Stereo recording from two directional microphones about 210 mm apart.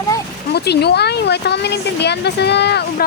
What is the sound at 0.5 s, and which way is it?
Speech, 50° left (ahead or behind).